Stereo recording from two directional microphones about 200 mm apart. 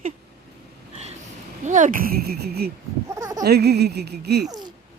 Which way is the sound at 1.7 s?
40° right (ahead or behind).